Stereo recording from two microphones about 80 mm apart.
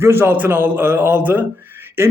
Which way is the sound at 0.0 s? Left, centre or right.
Right.